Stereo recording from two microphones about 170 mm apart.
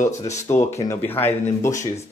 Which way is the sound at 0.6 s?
15° left (ahead or behind).